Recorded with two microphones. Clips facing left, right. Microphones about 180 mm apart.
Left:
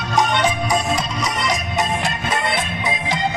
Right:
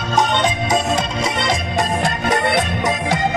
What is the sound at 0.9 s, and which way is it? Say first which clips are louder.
Music: right 3 dB; 30° right (ahead or behind).